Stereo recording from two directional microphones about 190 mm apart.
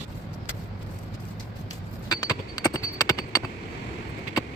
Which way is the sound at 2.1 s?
20° left (ahead or behind).